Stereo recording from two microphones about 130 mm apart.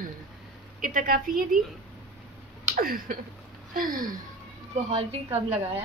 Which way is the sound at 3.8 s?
90° right.